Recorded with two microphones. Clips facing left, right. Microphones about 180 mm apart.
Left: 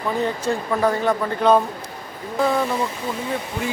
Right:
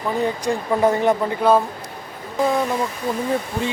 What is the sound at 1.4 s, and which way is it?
Speech, 5° right (ahead or behind).